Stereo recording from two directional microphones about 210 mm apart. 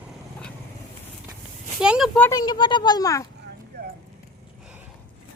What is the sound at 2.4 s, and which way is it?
Speech, 20° left (ahead or behind).